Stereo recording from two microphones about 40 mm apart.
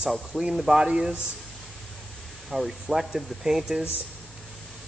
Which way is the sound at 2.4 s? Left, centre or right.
Centre.